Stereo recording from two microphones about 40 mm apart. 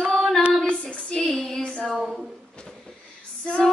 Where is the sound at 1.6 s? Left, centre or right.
Left.